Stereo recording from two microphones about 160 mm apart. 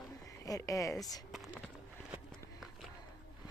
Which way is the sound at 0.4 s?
20° left (ahead or behind).